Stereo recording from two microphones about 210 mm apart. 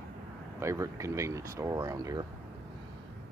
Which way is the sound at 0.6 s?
15° right (ahead or behind).